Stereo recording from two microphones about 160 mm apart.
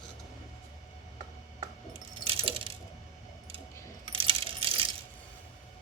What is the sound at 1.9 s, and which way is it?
Coin, 35° right (ahead or behind).